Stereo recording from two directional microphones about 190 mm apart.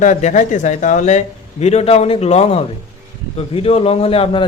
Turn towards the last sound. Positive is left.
turn(degrees=30)  # may be behind; listen again after turning